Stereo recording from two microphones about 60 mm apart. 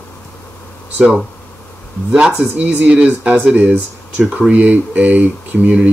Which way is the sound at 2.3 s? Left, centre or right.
Right.